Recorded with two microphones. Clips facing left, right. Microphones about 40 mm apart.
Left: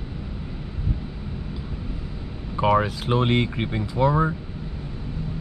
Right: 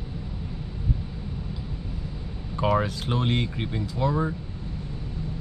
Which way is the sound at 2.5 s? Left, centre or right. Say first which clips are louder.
Left 4 dB; centre.